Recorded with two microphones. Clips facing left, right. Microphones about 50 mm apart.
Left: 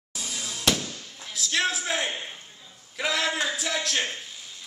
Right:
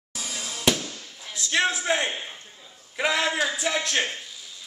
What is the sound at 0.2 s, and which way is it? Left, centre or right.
Music, centre.